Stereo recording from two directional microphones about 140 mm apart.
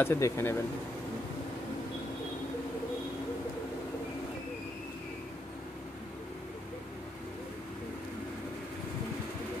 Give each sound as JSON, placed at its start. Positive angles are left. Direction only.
{"t": 0.0, "sound": "speech", "side_deg": 15}